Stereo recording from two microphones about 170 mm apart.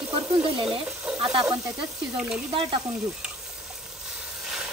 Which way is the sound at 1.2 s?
30° right (ahead or behind).